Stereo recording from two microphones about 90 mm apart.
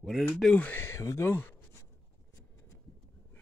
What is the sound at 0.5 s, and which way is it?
Speech, 15° left (ahead or behind).